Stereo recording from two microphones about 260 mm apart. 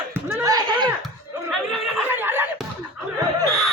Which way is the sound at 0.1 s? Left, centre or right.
Centre.